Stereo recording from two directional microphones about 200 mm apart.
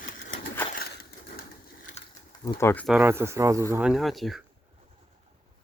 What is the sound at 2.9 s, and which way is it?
Speech, 10° right (ahead or behind).